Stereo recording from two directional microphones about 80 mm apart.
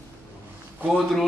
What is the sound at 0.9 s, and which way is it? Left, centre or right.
Speech, centre.